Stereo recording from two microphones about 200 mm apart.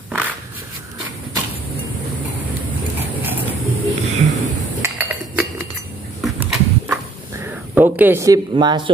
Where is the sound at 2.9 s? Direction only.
10° right (ahead or behind).